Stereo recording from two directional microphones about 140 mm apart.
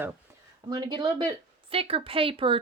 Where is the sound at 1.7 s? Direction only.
45° right (ahead or behind).